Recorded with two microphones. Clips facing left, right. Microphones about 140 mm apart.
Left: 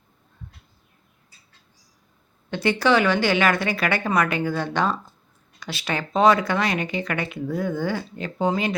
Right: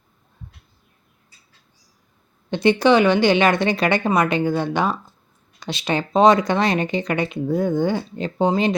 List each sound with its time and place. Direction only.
2.5 s speech: 20° right (ahead or behind)
5.5 s speech: 20° right (ahead or behind)